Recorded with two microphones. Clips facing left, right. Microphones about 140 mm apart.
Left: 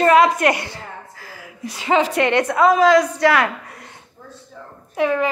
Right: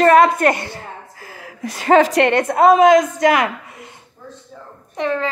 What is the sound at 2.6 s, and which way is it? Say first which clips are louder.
Speech: right 3 dB; 25° right (ahead or behind).